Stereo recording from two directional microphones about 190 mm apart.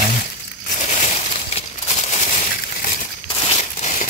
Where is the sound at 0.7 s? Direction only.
40° left (ahead or behind).